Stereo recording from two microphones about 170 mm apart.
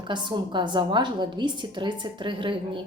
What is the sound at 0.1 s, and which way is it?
A woman's voice, 25° right (ahead or behind).